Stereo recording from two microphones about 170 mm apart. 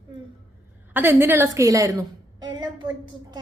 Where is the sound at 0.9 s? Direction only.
10° right (ahead or behind).